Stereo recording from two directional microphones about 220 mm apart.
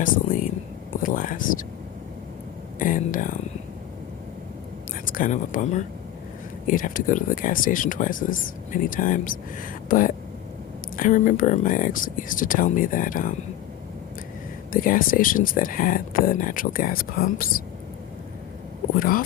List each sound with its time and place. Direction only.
1.0 s speech: 40° left (ahead or behind)
2.7 s speech: 40° left (ahead or behind)
5.0 s speech: 40° left (ahead or behind)
14.7 s speech: 40° left (ahead or behind)
18.9 s speech: 40° left (ahead or behind)